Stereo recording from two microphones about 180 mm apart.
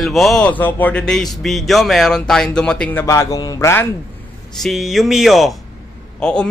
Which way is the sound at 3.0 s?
20° left (ahead or behind).